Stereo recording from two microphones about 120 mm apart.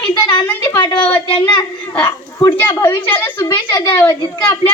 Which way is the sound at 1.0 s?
10° left (ahead or behind).